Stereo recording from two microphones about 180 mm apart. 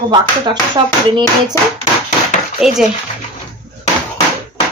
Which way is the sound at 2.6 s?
5° right (ahead or behind).